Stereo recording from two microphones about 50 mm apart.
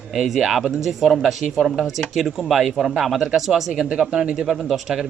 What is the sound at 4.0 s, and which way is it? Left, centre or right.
Speech, centre.